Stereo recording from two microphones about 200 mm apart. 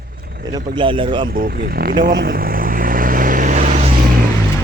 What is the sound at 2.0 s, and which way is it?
Vehicle, 45° right (ahead or behind).